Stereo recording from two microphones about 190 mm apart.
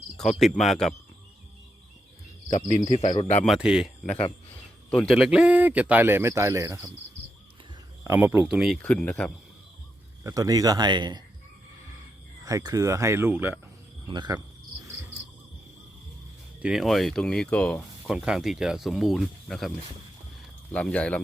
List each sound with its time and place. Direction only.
0.2 s speech: centre (ahead or behind)
2.5 s cricket: 35° left (ahead or behind)
3.4 s speech: 5° right (ahead or behind)
4.0 s cricket: 35° left (ahead or behind)
4.9 s speech: 5° left (ahead or behind); by 6.9 s 15° right (ahead or behind)
8.0 s speech: 15° right (ahead or behind); by 9.3 s 5° left (ahead or behind)
10.2 s speech: 20° right (ahead or behind)
12.5 s speech: 15° right (ahead or behind)
14.1 s speech: 20° right (ahead or behind)
16.6 s speech: 5° right (ahead or behind)
18.1 s speech: 5° right (ahead or behind)
20.7 s speech: 5° left (ahead or behind)